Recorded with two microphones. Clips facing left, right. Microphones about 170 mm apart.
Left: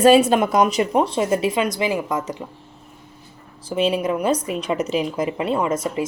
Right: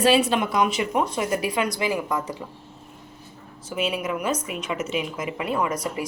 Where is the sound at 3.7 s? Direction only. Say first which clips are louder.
Left 6 dB; 30° left (ahead or behind).